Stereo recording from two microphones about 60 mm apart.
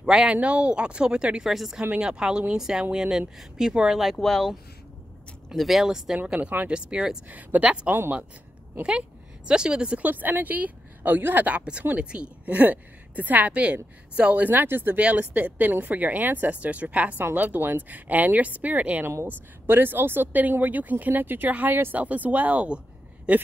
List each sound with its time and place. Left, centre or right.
0.0 s speech: centre
1.4 s speech: centre
1.8 s speech: centre
5.6 s speech: centre
6.1 s speech: right
7.2 s speech: right
7.9 s speech: right
9.5 s speech: centre
12.0 s speech: centre; by 15.0 s right
15.0 s speech: right
19.2 s speech: right